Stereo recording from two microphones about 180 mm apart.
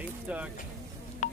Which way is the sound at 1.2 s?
40° left (ahead or behind).